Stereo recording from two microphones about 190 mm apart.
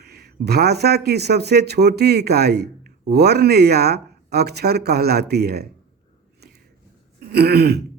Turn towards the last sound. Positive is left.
turn(degrees=-60)  # may be behind; listen again after turning